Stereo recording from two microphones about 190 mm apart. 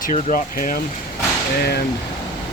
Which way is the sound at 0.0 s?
45° left (ahead or behind).